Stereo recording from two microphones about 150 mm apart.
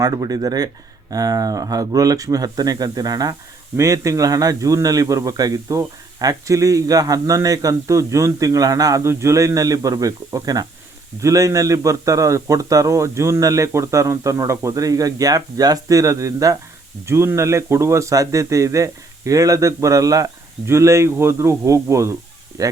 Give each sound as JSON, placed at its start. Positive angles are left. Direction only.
{"t": 0.0, "sound": "a man's voice", "side_deg": -25}